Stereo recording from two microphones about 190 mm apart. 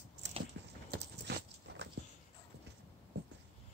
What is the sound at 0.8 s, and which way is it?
Clip-clop, 65° right (ahead or behind).